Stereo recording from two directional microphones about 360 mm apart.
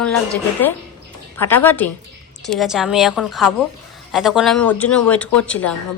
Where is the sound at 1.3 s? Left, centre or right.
Centre.